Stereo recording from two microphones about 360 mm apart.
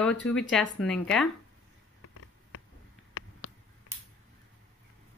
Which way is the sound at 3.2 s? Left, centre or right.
Left.